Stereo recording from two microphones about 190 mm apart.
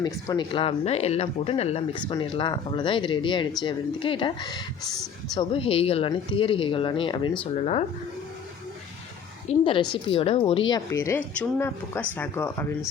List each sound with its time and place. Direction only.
0.0 s speech: 25° left (ahead or behind)
9.5 s a woman's voice: 35° left (ahead or behind)
10.7 s speech: 15° left (ahead or behind)